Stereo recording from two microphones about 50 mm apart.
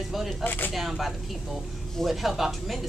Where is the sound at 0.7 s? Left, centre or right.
Centre.